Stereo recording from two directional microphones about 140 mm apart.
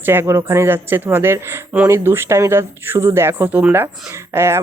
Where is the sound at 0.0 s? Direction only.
15° right (ahead or behind).